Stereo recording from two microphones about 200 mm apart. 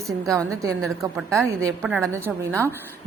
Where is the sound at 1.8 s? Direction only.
5° right (ahead or behind).